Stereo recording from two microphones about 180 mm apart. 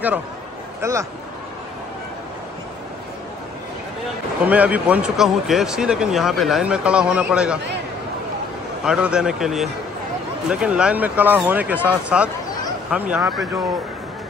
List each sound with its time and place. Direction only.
0.7 s speech: 15° right (ahead or behind)
4.4 s speech: 10° right (ahead or behind)
8.8 s speech: 5° right (ahead or behind)